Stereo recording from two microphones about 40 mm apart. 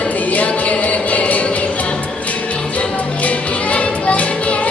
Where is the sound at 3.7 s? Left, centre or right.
Left.